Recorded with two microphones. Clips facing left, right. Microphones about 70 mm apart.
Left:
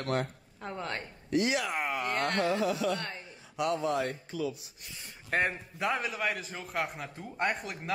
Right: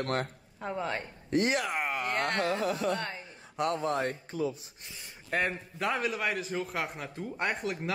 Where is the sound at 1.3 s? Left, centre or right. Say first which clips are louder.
Right 1 dB; right.